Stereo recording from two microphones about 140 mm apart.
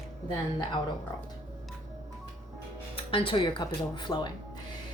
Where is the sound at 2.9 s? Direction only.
40° left (ahead or behind).